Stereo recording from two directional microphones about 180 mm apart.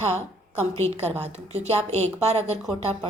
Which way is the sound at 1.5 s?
35° right (ahead or behind).